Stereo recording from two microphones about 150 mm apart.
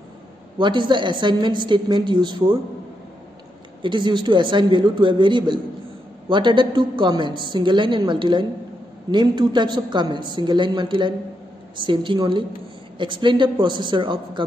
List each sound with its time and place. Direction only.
0.6 s a woman's voice: 30° right (ahead or behind)
3.8 s a woman's voice: 30° right (ahead or behind)